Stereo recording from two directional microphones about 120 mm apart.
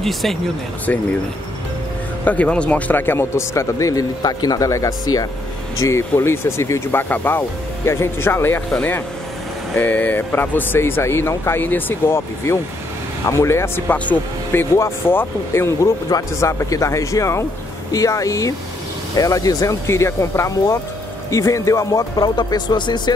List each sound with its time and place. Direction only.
0.0 s speech: centre (ahead or behind)
2.2 s speech: 10° left (ahead or behind); by 23.1 s 40° left (ahead or behind)